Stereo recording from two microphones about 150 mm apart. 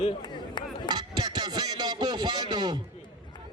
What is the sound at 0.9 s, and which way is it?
Speech, 30° right (ahead or behind).